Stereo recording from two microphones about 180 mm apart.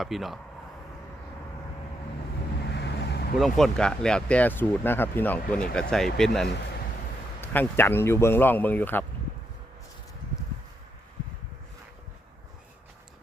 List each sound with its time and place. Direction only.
0.0 s speech: centre (ahead or behind)
2.6 s vehicle: 65° left (ahead or behind)
3.3 s speech: centre (ahead or behind)